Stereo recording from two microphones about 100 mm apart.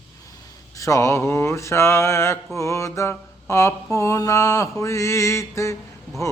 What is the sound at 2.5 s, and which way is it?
Mantra, 30° left (ahead or behind).